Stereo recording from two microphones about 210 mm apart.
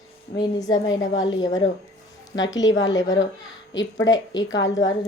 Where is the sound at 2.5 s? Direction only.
60° left (ahead or behind).